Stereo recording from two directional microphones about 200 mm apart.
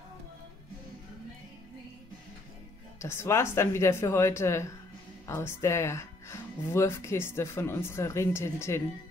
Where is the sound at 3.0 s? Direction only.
15° left (ahead or behind).